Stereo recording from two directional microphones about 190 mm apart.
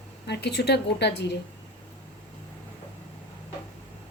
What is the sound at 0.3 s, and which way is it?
A woman's voice, 60° left (ahead or behind).